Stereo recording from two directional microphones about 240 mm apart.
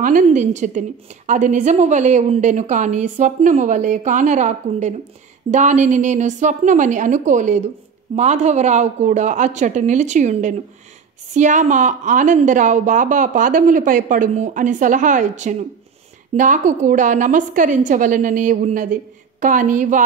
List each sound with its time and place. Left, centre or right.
0.0 s a woman's voice: right